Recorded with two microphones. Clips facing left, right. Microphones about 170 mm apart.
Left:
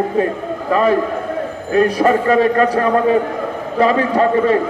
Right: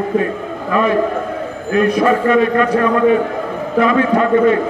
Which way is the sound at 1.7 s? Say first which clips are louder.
Even; 35° left (ahead or behind).